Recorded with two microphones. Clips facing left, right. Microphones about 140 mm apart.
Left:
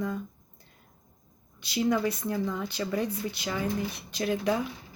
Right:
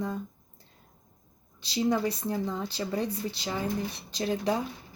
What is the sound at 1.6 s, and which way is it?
Speech, 30° right (ahead or behind).